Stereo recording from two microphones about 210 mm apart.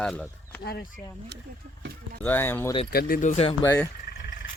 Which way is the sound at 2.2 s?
10° left (ahead or behind).